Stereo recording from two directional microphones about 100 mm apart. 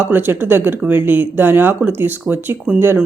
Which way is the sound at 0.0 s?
20° right (ahead or behind).